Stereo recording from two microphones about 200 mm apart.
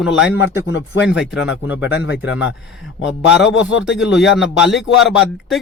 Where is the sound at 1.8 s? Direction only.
60° left (ahead or behind).